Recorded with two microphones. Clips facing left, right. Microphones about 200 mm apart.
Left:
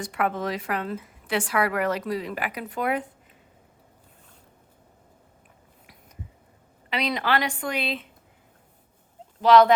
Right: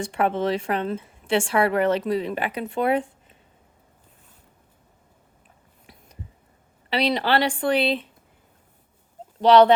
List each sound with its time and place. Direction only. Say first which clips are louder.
0.0 s a woman's voice: right 4 dB; 25° right (ahead or behind)
6.9 s speech: right 4 dB; 30° right (ahead or behind)
9.4 s speech: right 2 dB; 30° right (ahead or behind)